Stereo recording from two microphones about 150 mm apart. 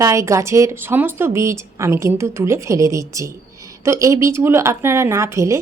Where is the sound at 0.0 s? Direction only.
20° right (ahead or behind).